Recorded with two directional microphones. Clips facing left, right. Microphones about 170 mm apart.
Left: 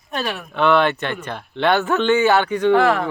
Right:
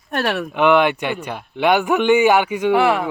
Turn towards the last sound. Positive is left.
turn(degrees=-15)  # may be behind; listen again after turning